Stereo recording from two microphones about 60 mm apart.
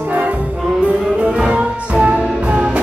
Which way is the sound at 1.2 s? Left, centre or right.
Centre.